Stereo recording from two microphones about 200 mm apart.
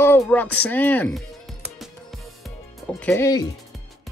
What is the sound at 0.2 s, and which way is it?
Speech, 5° left (ahead or behind).